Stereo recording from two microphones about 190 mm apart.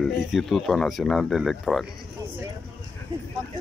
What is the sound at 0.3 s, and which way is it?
Speech, centre (ahead or behind).